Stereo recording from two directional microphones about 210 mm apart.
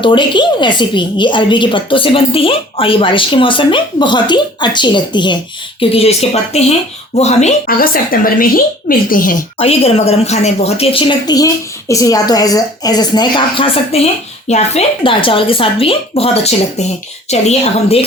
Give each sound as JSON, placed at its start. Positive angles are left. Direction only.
{"t": 0.0, "sound": "a woman's voice", "side_deg": 25}
{"t": 9.6, "sound": "a woman's voice", "side_deg": 30}